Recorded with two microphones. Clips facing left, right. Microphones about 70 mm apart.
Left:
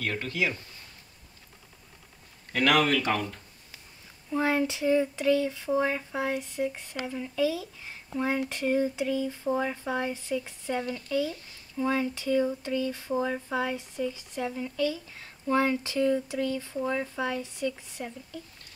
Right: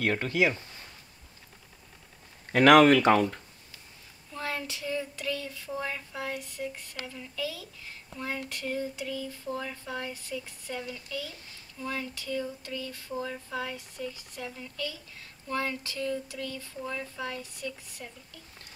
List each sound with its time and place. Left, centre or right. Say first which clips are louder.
0.0 s speech: right 4 dB; right
2.5 s speech: right 6 dB; right
4.3 s child singing: left 9 dB; centre